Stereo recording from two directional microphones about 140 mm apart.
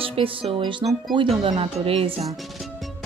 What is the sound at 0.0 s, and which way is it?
Speech, 40° right (ahead or behind).